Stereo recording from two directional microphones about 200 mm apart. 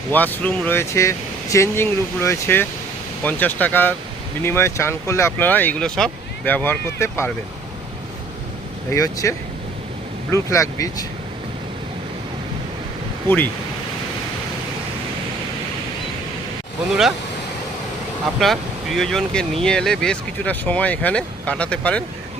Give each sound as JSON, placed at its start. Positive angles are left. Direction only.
{"t": 0.1, "sound": "speech", "side_deg": 10}
{"t": 8.9, "sound": "speech", "side_deg": 15}
{"t": 10.3, "sound": "speech", "side_deg": 15}
{"t": 13.2, "sound": "speech", "side_deg": 10}
{"t": 16.9, "sound": "speech", "side_deg": 0}
{"t": 18.3, "sound": "speech", "side_deg": 0}